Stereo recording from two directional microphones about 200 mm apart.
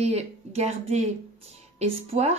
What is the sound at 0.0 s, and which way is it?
A woman's voice, 30° right (ahead or behind).